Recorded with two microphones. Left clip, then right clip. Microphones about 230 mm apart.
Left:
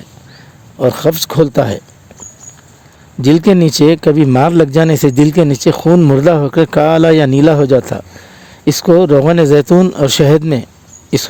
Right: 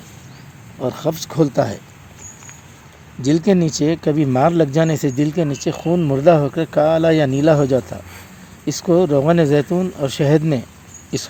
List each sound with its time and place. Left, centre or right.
0.8 s a man's voice: left
3.2 s a man's voice: left